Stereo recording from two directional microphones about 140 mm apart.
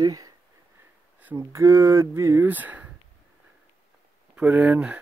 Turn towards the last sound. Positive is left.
turn(degrees=-10)  # may be behind; listen again after turning